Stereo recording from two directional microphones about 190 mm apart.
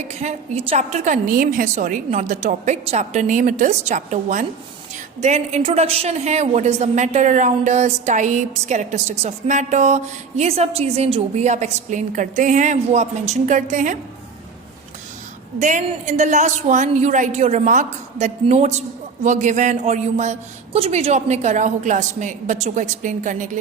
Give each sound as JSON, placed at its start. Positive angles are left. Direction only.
{"t": 0.0, "sound": "a woman's voice", "side_deg": -35}
{"t": 15.5, "sound": "a woman's voice", "side_deg": -40}